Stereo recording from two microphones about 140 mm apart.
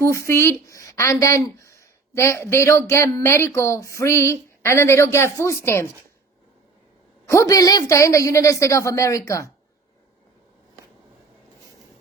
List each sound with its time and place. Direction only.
0.0 s speech: 20° left (ahead or behind)
7.3 s speech: 25° left (ahead or behind)